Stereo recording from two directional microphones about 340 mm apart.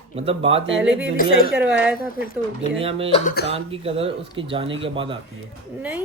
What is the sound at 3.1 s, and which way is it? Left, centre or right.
Speech, left.